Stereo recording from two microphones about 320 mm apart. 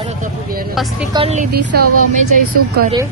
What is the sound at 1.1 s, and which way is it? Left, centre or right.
Vehicle, centre.